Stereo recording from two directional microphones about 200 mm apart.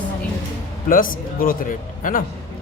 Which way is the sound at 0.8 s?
45° left (ahead or behind).